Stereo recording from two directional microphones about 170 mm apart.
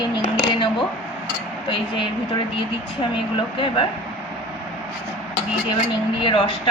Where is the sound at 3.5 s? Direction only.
30° left (ahead or behind).